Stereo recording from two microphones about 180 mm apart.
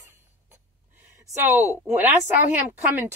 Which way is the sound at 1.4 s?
10° right (ahead or behind).